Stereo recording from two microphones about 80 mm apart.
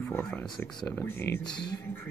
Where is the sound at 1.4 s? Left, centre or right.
Left.